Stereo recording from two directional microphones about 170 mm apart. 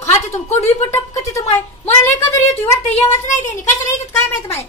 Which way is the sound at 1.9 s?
15° left (ahead or behind).